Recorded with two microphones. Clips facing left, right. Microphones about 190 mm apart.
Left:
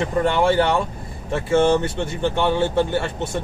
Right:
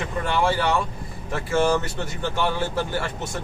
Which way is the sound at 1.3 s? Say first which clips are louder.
Left 4 dB; 25° left (ahead or behind).